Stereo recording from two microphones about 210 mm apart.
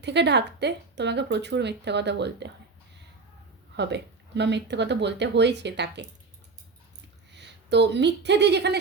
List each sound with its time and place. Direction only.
0.0 s speech: 55° right (ahead or behind)
3.8 s speech: 55° right (ahead or behind)
7.3 s speech: 55° right (ahead or behind)